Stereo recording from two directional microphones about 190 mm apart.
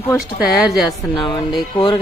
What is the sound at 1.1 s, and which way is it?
Speech, 25° left (ahead or behind).